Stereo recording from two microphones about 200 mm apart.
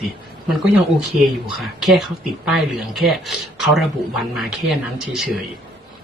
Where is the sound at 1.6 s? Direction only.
Centre (ahead or behind).